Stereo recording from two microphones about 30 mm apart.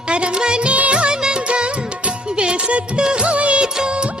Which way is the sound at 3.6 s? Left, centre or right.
Right.